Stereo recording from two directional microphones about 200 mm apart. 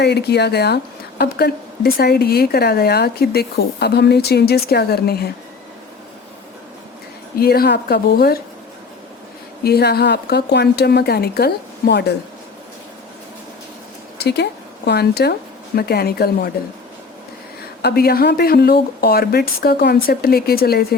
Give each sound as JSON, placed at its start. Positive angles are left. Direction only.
{"t": 0.0, "sound": "a woman's voice", "side_deg": 55}
{"t": 7.3, "sound": "a woman's voice", "side_deg": 50}
{"t": 9.6, "sound": "a woman's voice", "side_deg": 50}
{"t": 14.2, "sound": "a woman's voice", "side_deg": 55}
{"t": 17.8, "sound": "a woman's voice", "side_deg": 50}